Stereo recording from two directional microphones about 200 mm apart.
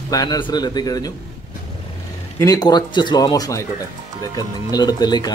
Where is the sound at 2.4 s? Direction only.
20° left (ahead or behind).